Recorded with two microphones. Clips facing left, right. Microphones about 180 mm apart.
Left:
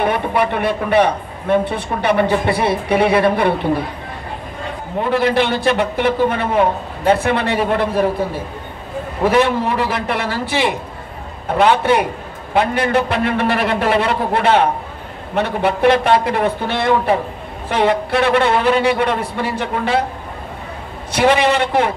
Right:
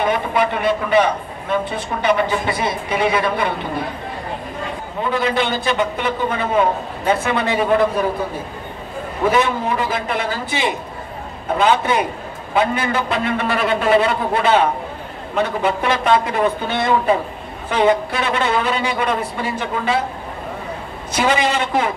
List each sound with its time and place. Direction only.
0.0 s a man's voice: 65° left (ahead or behind)
5.0 s a man's voice: 65° left (ahead or behind)
9.3 s a man's voice: 65° left (ahead or behind)
21.2 s a man's voice: 65° left (ahead or behind)